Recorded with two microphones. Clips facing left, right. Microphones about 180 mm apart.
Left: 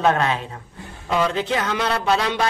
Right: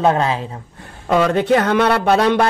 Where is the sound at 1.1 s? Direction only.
55° right (ahead or behind).